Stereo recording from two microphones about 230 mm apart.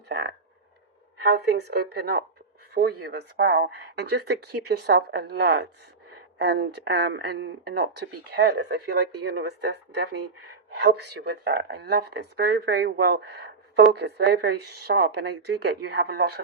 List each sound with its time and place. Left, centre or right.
0.1 s speech: right